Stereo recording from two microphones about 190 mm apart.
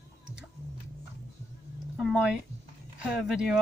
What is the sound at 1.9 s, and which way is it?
Speech, centre (ahead or behind).